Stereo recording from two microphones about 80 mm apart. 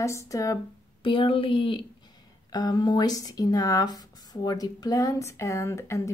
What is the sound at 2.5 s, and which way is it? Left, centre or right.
A woman's voice, left.